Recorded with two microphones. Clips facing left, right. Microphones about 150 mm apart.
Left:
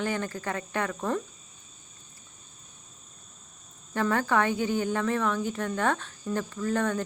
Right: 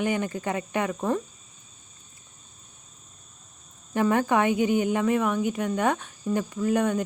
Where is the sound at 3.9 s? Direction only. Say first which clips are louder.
Right 3 dB; 15° right (ahead or behind).